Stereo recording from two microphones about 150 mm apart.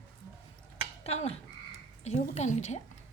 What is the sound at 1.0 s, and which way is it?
Frog, 45° left (ahead or behind).